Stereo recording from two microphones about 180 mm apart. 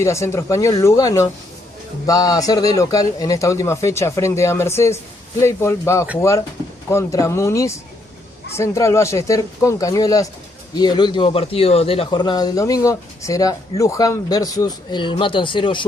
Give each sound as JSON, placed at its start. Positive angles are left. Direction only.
{"t": 0.0, "sound": "a man's voice", "side_deg": 15}